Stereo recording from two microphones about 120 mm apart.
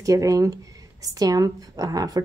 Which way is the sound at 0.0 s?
25° right (ahead or behind).